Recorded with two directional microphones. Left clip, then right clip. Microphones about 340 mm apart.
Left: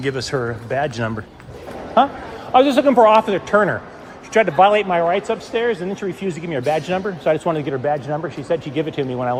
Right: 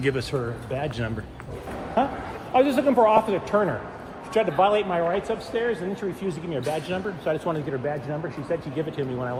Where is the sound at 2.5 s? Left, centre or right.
Left.